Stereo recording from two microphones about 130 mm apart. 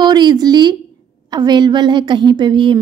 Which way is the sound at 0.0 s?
35° right (ahead or behind).